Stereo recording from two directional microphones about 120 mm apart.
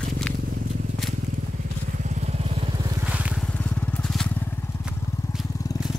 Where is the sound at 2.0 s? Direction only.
70° right (ahead or behind).